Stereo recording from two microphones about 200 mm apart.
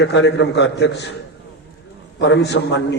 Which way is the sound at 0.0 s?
60° left (ahead or behind).